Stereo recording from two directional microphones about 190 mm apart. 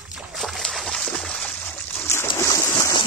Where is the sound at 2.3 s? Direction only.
15° left (ahead or behind).